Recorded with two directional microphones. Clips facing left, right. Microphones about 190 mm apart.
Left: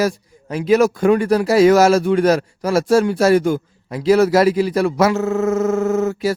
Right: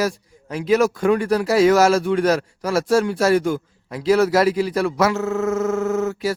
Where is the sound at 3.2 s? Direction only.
10° left (ahead or behind).